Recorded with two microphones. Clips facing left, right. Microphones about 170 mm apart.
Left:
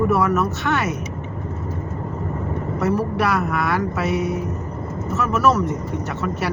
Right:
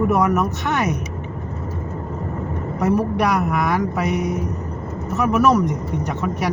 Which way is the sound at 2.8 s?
15° right (ahead or behind).